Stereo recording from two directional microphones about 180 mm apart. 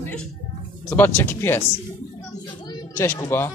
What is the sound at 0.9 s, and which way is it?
Speech, 10° left (ahead or behind).